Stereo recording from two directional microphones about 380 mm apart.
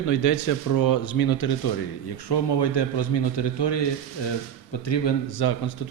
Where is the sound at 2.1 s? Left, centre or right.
Left.